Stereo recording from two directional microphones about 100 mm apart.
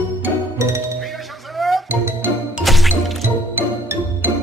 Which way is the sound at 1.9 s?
20° right (ahead or behind).